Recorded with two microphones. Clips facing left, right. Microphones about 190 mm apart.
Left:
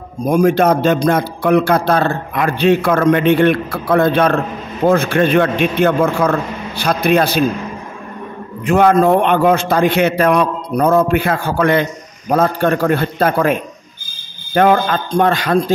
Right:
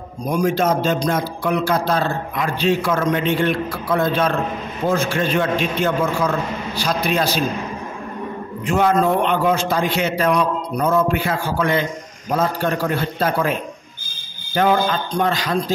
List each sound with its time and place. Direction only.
0.3 s a man's voice: 55° left (ahead or behind)
8.6 s a man's voice: 60° left (ahead or behind)